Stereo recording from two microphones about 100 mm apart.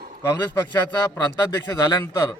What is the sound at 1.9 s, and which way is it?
Speech, 30° left (ahead or behind).